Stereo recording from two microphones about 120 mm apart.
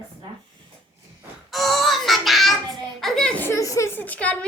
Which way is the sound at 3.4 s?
25° left (ahead or behind).